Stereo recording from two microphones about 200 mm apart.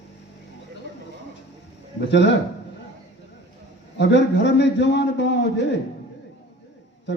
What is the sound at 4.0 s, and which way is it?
A man's voice, 60° left (ahead or behind).